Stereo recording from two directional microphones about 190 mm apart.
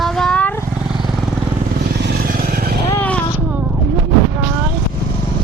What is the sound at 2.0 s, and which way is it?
Vehicle, 50° right (ahead or behind).